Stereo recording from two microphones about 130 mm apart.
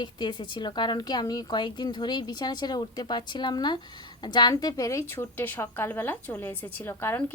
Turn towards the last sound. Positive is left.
turn(degrees=15)  # may be behind; listen again after turning